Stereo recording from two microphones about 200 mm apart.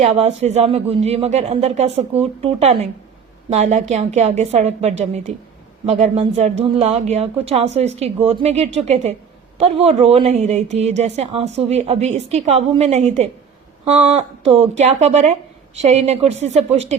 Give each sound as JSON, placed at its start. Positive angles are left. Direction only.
{"t": 0.0, "sound": "speech", "side_deg": -35}